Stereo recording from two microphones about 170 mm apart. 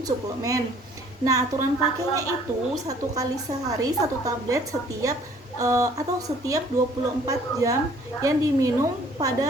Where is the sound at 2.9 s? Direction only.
20° right (ahead or behind).